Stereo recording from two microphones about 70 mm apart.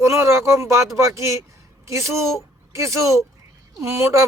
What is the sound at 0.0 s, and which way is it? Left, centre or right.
A woman's voice, right.